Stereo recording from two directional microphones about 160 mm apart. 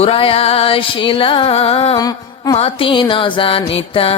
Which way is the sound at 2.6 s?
35° left (ahead or behind).